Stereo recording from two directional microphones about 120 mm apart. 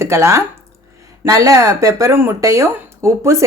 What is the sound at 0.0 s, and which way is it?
Speech, 25° right (ahead or behind).